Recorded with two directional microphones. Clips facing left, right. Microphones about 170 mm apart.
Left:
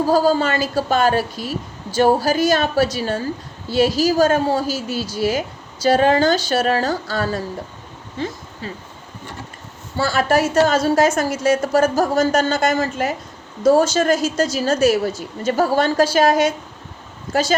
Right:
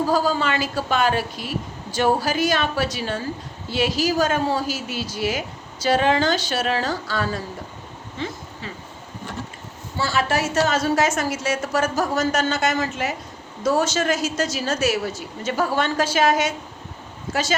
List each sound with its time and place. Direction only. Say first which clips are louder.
0.1 s a woman's voice: left 5 dB; 40° left (ahead or behind)
10.0 s a woman's voice: left 5 dB; 45° left (ahead or behind)